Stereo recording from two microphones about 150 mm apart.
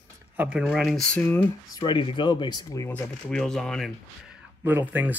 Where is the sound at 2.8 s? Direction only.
10° left (ahead or behind).